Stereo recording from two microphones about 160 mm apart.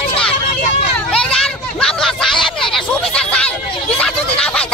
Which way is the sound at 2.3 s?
30° left (ahead or behind).